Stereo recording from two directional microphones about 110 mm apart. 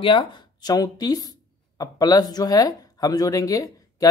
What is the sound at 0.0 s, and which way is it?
Speech, 50° left (ahead or behind).